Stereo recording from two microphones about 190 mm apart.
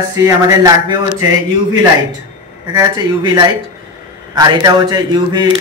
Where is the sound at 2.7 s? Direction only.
20° right (ahead or behind).